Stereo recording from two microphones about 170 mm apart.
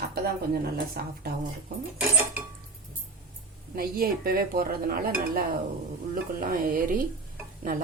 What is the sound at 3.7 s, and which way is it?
A woman's voice, 60° right (ahead or behind).